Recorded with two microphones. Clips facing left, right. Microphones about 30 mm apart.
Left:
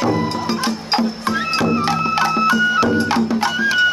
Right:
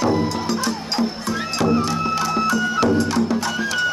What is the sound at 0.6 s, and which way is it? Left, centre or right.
Music, left.